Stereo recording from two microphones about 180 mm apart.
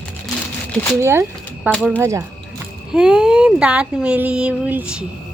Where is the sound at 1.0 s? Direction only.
15° right (ahead or behind).